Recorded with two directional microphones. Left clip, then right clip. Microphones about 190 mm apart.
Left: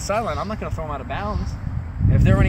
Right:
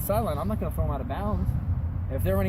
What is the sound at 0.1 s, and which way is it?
Speech, 10° right (ahead or behind).